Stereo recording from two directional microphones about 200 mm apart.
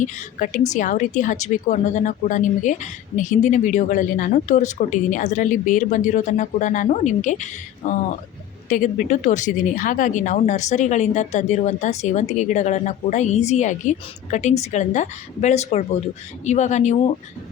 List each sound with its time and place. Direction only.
0.0 s speech: 40° left (ahead or behind)